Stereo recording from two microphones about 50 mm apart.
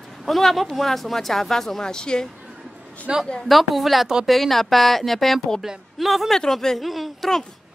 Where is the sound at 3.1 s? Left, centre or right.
Centre.